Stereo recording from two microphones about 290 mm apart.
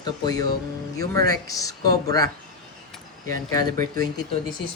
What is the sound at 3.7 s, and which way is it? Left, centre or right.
Speech, right.